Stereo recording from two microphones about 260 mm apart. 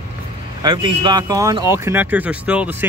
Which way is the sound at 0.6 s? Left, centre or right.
Centre.